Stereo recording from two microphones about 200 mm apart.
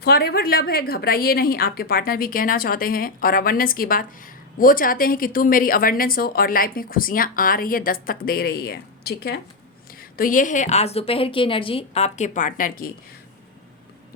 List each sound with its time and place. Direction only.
0.0 s a woman's voice: 50° left (ahead or behind)